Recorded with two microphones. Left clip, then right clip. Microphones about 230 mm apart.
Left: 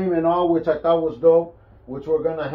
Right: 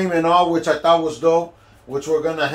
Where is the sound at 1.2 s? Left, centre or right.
Right.